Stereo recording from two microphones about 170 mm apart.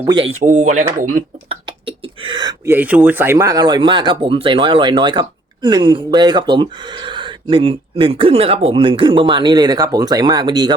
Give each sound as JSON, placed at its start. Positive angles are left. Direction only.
{"t": 0.0, "sound": "speech", "side_deg": -30}
{"t": 0.3, "sound": "speech", "side_deg": -45}
{"t": 1.5, "sound": "whispering", "side_deg": -30}
{"t": 2.6, "sound": "speech", "side_deg": -10}